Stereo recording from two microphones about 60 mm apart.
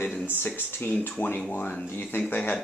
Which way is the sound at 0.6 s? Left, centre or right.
Left.